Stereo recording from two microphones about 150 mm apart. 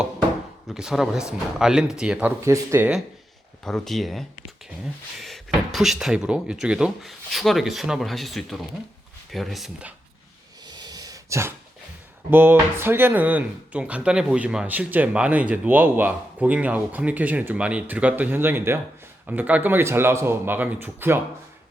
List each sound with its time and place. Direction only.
0.7 s speech: 5° right (ahead or behind)
2.4 s speech: 20° right (ahead or behind)
3.6 s speech: 5° left (ahead or behind)
10.7 s a sound: 25° right (ahead or behind)
12.3 s speech: 15° right (ahead or behind)